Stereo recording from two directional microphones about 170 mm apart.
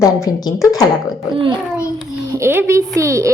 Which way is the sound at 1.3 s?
30° right (ahead or behind).